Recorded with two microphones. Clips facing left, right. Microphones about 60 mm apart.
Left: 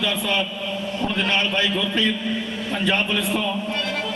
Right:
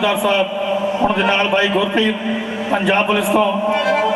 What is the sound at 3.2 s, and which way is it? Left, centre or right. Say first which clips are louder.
Music: right 9 dB; right.